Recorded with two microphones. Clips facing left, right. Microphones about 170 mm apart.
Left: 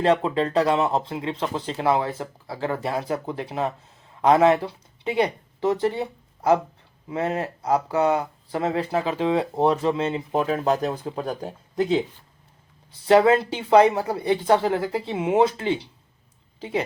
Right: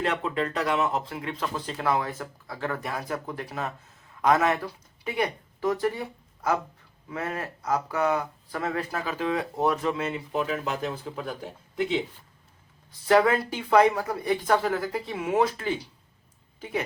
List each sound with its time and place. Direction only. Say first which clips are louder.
0.0 s speech: left 7 dB; 30° left (ahead or behind)
10.3 s speech: left 7 dB; 45° left (ahead or behind)
13.1 s speech: left 4 dB; 25° left (ahead or behind)